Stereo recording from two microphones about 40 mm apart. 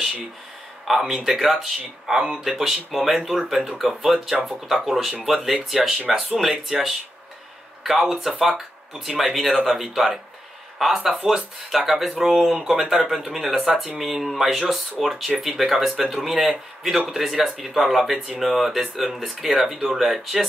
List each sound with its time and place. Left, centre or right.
0.8 s speech: centre